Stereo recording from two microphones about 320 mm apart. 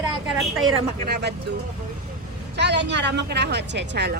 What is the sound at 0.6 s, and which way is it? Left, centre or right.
Speech, right.